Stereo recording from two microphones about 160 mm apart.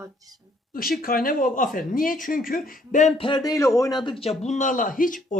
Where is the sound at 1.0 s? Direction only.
65° left (ahead or behind).